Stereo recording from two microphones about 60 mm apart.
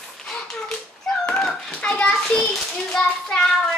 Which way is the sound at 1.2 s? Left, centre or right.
Centre.